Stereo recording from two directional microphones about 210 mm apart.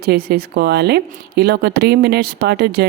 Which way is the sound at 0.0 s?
45° right (ahead or behind).